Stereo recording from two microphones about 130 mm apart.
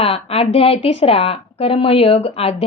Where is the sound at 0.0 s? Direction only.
50° left (ahead or behind).